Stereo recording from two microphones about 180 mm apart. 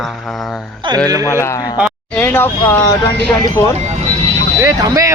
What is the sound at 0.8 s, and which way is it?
Speech, 25° right (ahead or behind).